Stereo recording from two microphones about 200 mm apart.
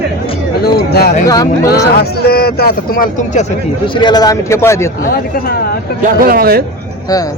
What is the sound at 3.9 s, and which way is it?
Speech, 20° left (ahead or behind).